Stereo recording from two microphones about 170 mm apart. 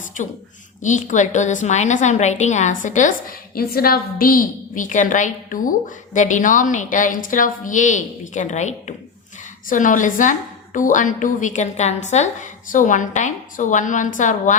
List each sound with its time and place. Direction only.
0.2 s a woman's voice: 50° left (ahead or behind)